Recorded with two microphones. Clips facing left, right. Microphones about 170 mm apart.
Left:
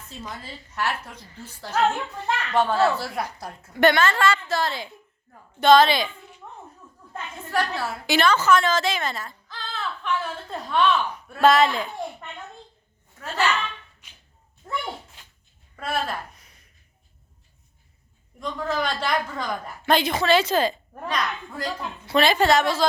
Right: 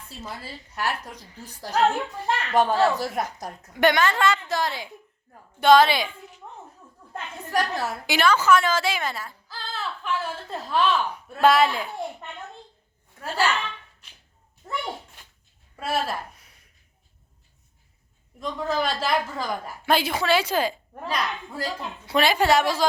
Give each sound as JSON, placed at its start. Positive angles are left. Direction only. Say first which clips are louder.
{"t": 0.3, "sound": "a woman's voice", "louder": "even", "side_deg": -15}
{"t": 7.5, "sound": "a woman's voice", "louder": "even", "side_deg": -15}
{"t": 13.2, "sound": "a woman's voice", "louder": "even", "side_deg": -10}
{"t": 15.7, "sound": "a woman's voice", "louder": "right 1 dB", "side_deg": -5}
{"t": 18.3, "sound": "a woman's voice", "louder": "right 1 dB", "side_deg": 0}